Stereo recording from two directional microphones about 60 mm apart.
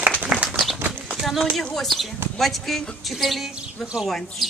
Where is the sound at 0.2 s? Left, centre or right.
Right.